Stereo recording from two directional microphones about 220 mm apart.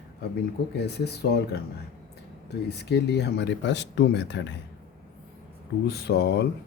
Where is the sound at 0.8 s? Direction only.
45° left (ahead or behind).